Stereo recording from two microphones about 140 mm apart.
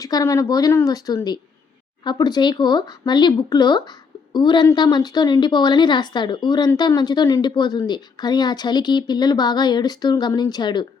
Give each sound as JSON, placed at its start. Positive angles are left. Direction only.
{"t": 0.0, "sound": "a woman's voice", "side_deg": 25}